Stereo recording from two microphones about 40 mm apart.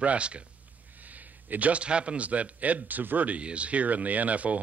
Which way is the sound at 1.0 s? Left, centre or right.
Right.